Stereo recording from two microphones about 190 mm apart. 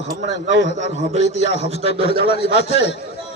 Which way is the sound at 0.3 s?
70° left (ahead or behind).